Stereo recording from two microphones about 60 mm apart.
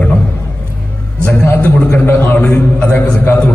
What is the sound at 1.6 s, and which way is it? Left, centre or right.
A man's voice, left.